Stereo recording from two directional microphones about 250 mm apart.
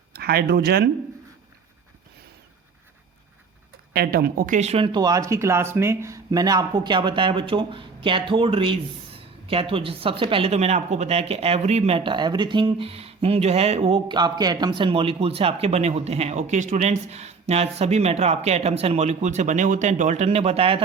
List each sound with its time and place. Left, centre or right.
0.1 s speech: right
3.9 s speech: right